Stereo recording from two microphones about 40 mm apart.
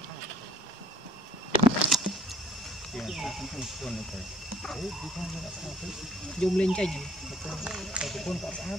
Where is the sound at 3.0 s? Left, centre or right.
Centre.